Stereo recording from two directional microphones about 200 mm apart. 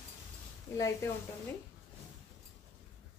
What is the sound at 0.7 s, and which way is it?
Speech, 15° left (ahead or behind).